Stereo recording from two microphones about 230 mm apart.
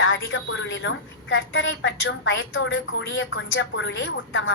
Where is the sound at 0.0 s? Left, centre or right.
Left.